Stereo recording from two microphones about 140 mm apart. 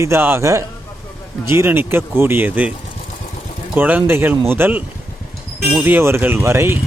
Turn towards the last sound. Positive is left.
turn(degrees=-20)  # may be behind; listen again after turning